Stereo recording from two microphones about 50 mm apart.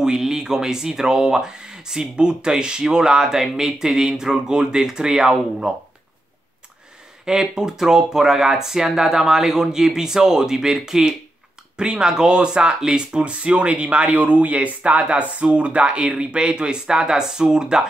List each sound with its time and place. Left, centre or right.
0.0 s speech: centre
7.2 s speech: centre